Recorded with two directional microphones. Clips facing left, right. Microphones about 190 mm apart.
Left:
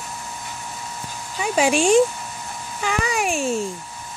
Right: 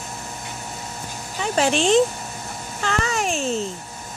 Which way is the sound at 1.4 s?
10° left (ahead or behind).